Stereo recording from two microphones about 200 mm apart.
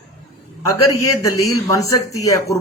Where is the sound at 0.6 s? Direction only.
15° left (ahead or behind).